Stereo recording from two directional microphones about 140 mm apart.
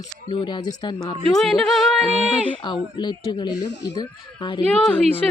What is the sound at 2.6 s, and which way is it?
A woman's voice, 35° left (ahead or behind).